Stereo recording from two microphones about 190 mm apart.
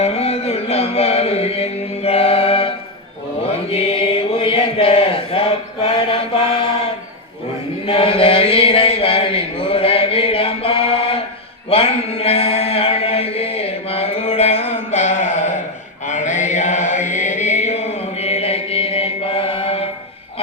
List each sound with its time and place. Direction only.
0.0 s music: 30° left (ahead or behind)
3.4 s chant: 30° left (ahead or behind)
7.9 s chant: 30° left (ahead or behind)
11.7 s mantra: 30° left (ahead or behind)
16.0 s chant: 40° left (ahead or behind)